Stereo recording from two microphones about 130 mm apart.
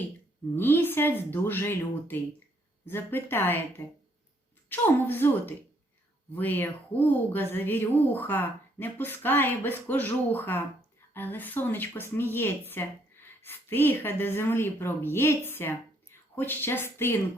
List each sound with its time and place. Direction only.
0.5 s a woman's voice: 15° left (ahead or behind)
4.7 s a woman's voice: 15° left (ahead or behind)